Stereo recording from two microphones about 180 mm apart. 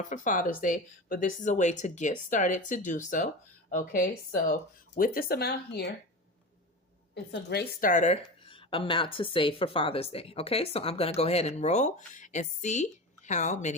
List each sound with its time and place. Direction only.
0.0 s speech: 45° left (ahead or behind); by 5.9 s 65° left (ahead or behind)
7.1 s a woman's voice: 75° left (ahead or behind); by 13.7 s 40° left (ahead or behind)